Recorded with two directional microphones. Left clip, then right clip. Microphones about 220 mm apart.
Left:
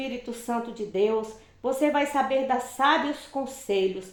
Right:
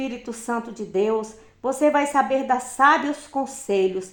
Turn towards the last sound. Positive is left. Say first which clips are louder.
# right 4 dB
turn(degrees=-45)  # may be behind; listen again after turning